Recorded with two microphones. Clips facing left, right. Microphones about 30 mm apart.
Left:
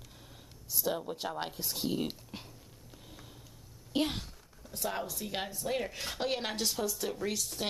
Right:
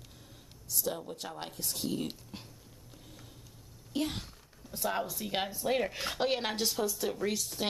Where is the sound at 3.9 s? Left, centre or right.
Left.